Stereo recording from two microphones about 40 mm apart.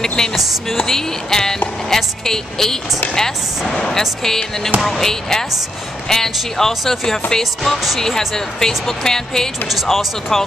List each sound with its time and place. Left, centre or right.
0.0 s speech: centre
9.7 s speech: centre